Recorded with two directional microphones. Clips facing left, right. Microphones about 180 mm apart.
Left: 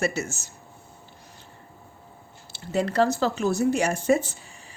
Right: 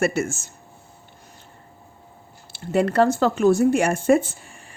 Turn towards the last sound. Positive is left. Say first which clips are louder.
# right 2 dB
turn(degrees=-55)  # may be behind; listen again after turning